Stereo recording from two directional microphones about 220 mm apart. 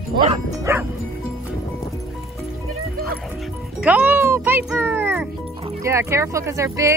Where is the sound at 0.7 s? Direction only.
10° right (ahead or behind).